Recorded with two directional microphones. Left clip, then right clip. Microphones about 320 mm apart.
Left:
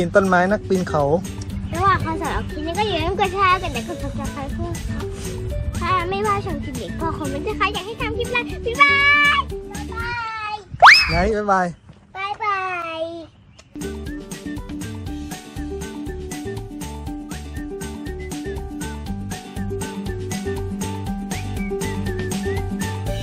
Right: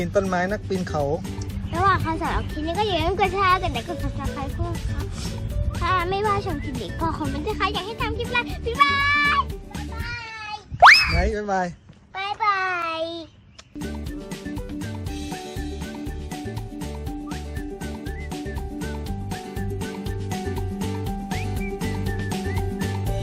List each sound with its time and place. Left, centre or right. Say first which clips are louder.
0.0 s speech: left 7 dB; left
0.7 s a child's voice: left 6 dB; centre
5.8 s a child's voice: left 2 dB; centre
10.8 s boing: left 2 dB; centre
12.1 s child singing: even; centre
19.8 s music: left 3 dB; centre